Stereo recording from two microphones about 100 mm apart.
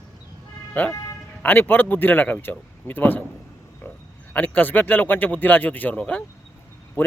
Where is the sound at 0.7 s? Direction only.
15° left (ahead or behind).